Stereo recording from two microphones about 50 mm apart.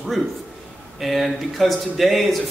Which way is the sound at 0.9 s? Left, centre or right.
Centre.